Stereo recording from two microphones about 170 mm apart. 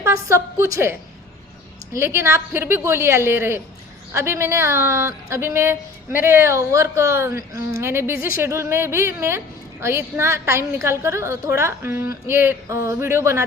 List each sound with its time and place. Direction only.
0.0 s a woman's voice: 15° right (ahead or behind)
2.0 s a woman's voice: 15° right (ahead or behind)